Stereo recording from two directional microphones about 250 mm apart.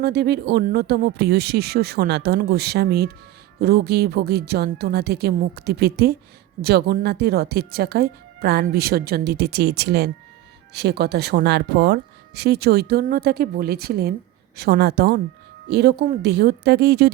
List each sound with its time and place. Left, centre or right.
0.0 s speech: right